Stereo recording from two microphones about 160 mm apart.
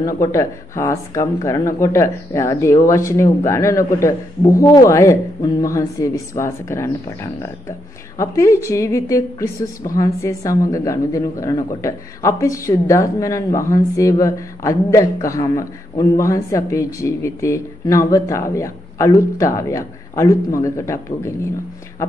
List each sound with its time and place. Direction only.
0.0 s a woman's voice: 20° left (ahead or behind)